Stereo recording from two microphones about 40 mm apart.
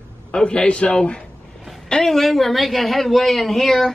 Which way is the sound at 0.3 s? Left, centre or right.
Left.